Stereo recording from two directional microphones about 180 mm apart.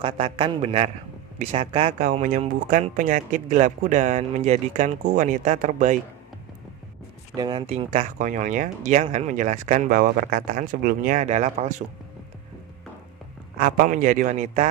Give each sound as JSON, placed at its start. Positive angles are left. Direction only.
{"t": 0.0, "sound": "a man's voice", "side_deg": -30}
{"t": 2.0, "sound": "speech", "side_deg": -45}
{"t": 7.3, "sound": "speech", "side_deg": -25}
{"t": 13.6, "sound": "speech", "side_deg": -50}